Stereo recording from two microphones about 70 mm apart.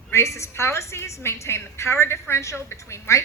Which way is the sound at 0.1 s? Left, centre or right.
Left.